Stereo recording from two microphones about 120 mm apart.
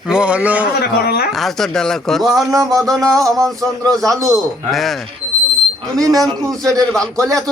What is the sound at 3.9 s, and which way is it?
Speech, 30° right (ahead or behind).